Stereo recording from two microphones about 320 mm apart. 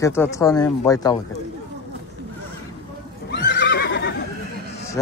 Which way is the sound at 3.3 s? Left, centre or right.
Left.